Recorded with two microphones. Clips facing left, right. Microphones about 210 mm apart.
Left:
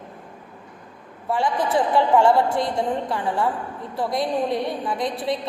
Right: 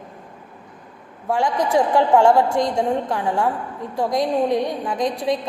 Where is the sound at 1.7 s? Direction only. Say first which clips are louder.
Right 2 dB; 15° right (ahead or behind).